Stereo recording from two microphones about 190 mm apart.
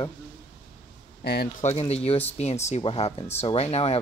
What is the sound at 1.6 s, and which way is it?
Speech, 30° left (ahead or behind).